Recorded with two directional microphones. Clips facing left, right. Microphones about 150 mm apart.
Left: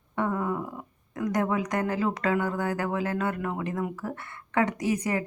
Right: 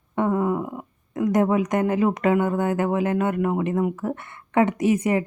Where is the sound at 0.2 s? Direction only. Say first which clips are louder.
Right 6 dB; 20° right (ahead or behind).